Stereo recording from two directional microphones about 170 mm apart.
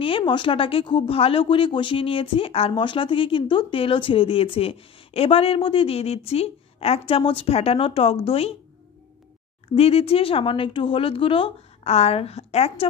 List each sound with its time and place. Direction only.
0.0 s speech: 30° left (ahead or behind)
9.8 s speech: 35° left (ahead or behind)